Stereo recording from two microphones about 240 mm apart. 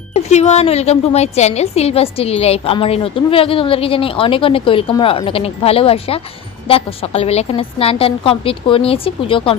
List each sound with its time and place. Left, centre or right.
0.1 s a woman's voice: left